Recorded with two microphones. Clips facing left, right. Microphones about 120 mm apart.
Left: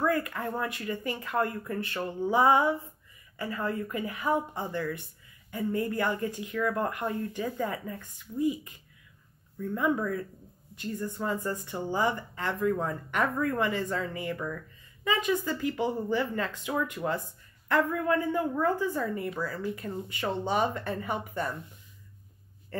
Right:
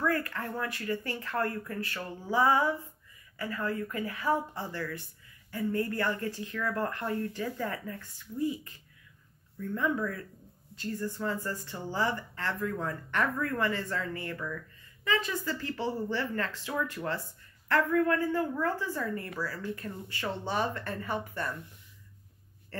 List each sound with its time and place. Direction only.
0.0 s a woman's voice: 15° left (ahead or behind)
9.8 s speech: 15° left (ahead or behind)
11.2 s a woman's voice: 20° left (ahead or behind)